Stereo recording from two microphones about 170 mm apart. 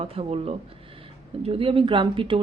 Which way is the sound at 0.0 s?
35° right (ahead or behind).